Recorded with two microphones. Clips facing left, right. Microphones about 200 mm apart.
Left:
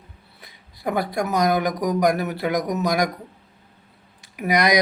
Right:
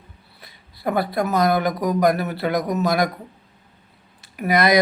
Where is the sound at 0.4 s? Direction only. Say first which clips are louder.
Right 2 dB; 15° left (ahead or behind).